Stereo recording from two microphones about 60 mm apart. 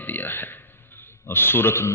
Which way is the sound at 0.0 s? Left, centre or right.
Left.